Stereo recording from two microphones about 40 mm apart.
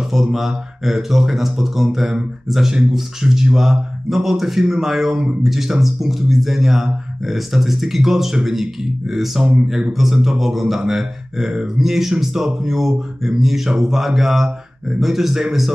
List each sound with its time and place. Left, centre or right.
0.1 s speech: centre